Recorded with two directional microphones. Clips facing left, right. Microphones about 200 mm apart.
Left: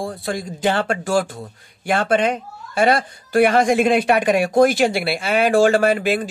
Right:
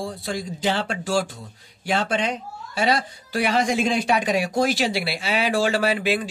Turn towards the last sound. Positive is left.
turn(degrees=50)  # may be behind; listen again after turning